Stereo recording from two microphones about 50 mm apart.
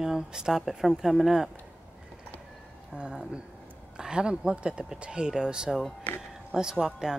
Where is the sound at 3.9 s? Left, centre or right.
Centre.